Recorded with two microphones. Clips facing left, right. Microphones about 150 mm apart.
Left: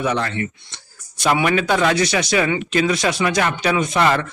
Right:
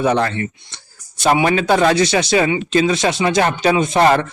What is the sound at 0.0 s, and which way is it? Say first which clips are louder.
A man's voice: right 5 dB; 35° right (ahead or behind).